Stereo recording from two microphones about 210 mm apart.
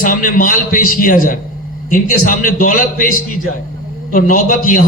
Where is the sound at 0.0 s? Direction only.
40° left (ahead or behind).